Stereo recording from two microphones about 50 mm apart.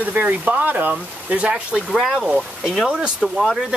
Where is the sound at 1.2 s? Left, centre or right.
Right.